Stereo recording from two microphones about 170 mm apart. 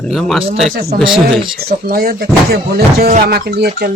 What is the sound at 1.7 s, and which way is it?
Speech, 60° right (ahead or behind).